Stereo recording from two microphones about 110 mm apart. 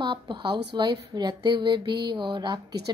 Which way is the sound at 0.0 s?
45° right (ahead or behind).